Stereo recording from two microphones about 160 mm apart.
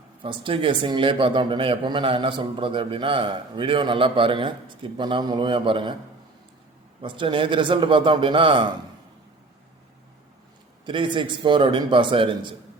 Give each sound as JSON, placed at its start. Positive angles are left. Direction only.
{"t": 0.2, "sound": "speech", "side_deg": -35}
{"t": 7.0, "sound": "speech", "side_deg": -30}
{"t": 10.8, "sound": "speech", "side_deg": -30}